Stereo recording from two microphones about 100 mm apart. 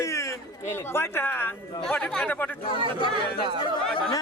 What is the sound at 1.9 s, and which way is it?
Speech, 10° left (ahead or behind).